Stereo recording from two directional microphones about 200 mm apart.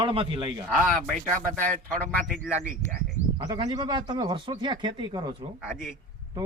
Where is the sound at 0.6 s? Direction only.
Centre (ahead or behind).